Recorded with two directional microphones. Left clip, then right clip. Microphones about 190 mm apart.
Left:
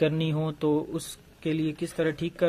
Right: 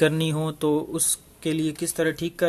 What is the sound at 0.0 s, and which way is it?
Speech, 15° right (ahead or behind).